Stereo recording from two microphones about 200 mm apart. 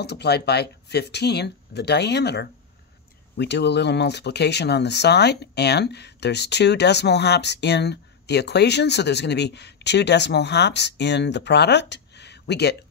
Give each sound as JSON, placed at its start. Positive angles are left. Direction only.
{"t": 0.0, "sound": "speech", "side_deg": 55}